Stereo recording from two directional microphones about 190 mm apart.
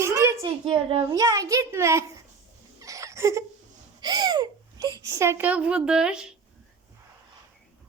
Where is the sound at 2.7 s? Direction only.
15° right (ahead or behind).